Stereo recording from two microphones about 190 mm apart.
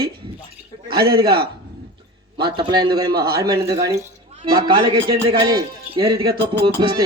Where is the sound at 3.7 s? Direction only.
15° right (ahead or behind).